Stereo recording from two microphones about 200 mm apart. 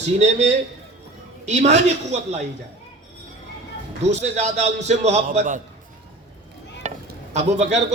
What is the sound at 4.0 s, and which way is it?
Speech, 35° right (ahead or behind).